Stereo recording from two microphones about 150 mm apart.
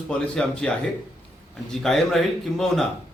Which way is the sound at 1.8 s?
Centre (ahead or behind).